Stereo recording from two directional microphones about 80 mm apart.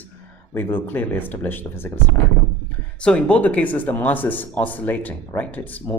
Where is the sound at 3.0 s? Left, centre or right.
Centre.